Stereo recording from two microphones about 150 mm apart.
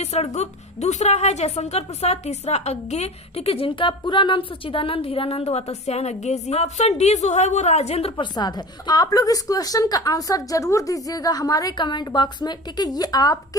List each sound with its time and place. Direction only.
0.0 s a woman's voice: 45° left (ahead or behind)
8.1 s a woman's voice: 30° left (ahead or behind)